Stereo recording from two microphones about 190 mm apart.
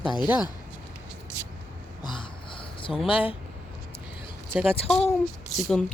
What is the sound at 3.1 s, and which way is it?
Speech, 25° left (ahead or behind).